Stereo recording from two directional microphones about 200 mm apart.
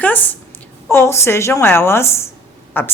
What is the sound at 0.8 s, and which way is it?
A woman's voice, 15° left (ahead or behind).